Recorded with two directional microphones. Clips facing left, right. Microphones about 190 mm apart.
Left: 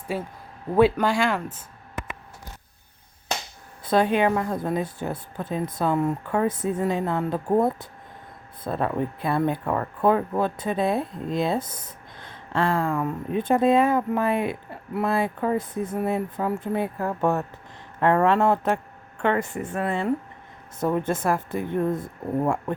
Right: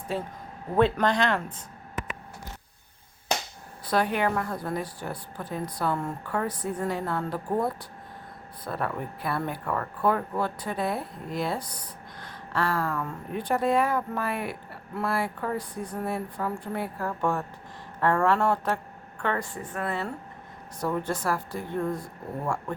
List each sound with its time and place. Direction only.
0.1 s speech: 10° left (ahead or behind)
3.8 s speech: 20° left (ahead or behind)
8.6 s speech: 25° left (ahead or behind)